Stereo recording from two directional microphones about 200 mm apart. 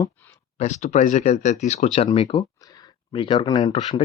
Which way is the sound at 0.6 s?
35° left (ahead or behind).